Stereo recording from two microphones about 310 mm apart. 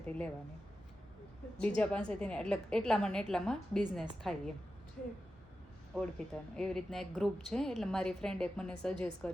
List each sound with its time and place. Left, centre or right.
1.6 s speech: centre
5.9 s speech: centre